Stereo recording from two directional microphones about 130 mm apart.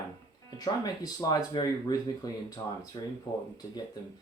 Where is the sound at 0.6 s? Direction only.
30° left (ahead or behind).